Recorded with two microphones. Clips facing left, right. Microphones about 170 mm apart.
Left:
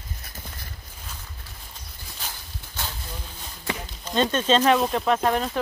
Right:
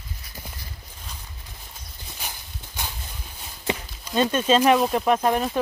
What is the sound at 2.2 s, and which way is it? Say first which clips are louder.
Horse: right 1 dB; 15° right (ahead or behind).